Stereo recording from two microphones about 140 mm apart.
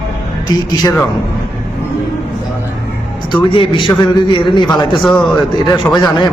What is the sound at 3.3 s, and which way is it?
A man's voice, 35° left (ahead or behind).